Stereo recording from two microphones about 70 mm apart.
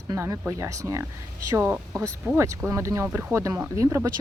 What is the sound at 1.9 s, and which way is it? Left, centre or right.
Speech, right.